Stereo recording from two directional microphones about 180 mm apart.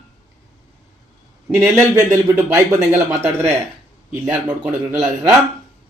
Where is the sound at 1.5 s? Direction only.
15° right (ahead or behind).